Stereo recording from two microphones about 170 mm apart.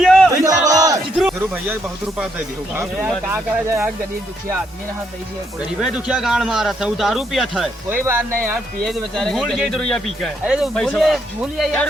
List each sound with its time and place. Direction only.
0.0 s battle cry: centre (ahead or behind)
0.3 s battle cry: 20° right (ahead or behind)
1.1 s speech: 5° right (ahead or behind)
5.8 s speech: 5° right (ahead or behind)
7.9 s speech: 15° right (ahead or behind)
8.8 s speech: centre (ahead or behind)